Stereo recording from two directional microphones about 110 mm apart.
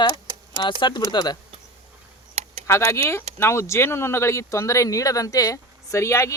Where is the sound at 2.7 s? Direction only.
25° left (ahead or behind).